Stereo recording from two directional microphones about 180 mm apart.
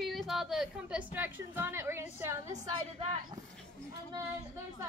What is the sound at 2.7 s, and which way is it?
Speech, 30° right (ahead or behind).